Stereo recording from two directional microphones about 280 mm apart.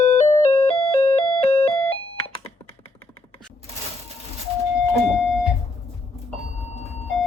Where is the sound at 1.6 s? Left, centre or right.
Centre.